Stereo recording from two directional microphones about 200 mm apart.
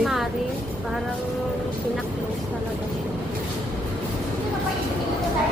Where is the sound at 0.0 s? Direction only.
Centre (ahead or behind).